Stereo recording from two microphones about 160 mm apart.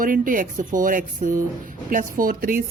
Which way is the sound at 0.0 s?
60° right (ahead or behind).